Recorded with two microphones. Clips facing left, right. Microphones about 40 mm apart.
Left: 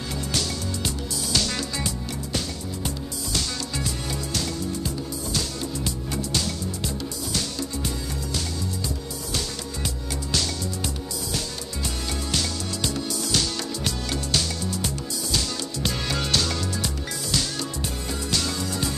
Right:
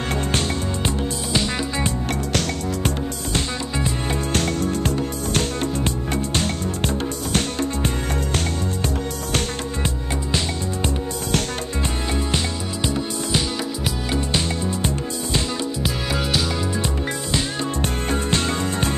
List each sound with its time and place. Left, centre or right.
0.1 s music: right
1.3 s music: right
3.3 s music: right
4.3 s music: right
12.3 s music: right
15.8 s music: centre
17.8 s music: right